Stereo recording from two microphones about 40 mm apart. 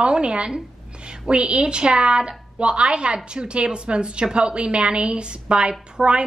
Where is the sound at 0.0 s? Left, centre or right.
Right.